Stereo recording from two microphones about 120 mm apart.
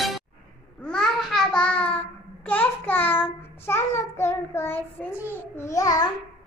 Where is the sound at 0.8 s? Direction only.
5° left (ahead or behind); by 6.0 s 30° left (ahead or behind).